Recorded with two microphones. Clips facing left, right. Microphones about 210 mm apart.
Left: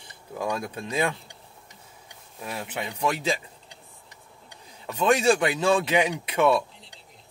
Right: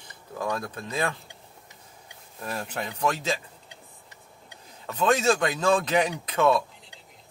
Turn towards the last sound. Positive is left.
turn(degrees=10)  # may be behind; listen again after turning